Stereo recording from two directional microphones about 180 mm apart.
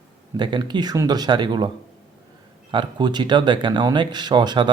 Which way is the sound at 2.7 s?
25° right (ahead or behind).